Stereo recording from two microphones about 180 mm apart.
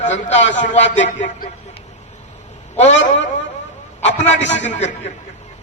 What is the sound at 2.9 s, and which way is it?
Speech, 90° left.